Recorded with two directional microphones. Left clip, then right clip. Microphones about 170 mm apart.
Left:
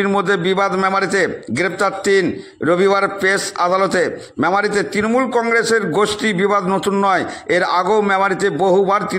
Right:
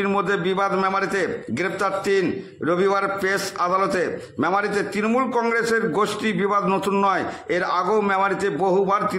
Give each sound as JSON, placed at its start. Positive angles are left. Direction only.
{"t": 0.0, "sound": "a man's voice", "side_deg": 25}